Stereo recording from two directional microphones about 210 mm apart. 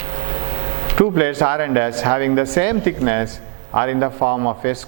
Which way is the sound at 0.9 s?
15° right (ahead or behind).